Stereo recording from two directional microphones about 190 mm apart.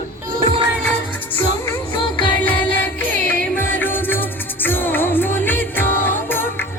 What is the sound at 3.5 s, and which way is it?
Music, 10° left (ahead or behind).